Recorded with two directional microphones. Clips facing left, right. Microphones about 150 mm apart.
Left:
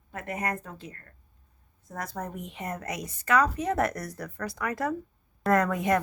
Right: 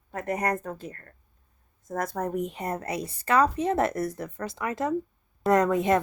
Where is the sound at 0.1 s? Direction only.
40° right (ahead or behind).